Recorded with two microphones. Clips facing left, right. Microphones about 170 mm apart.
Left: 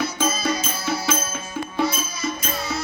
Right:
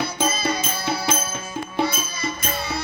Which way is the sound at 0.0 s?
60° right (ahead or behind).